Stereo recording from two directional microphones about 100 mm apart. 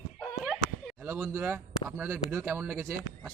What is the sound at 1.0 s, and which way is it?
Speech, 25° right (ahead or behind).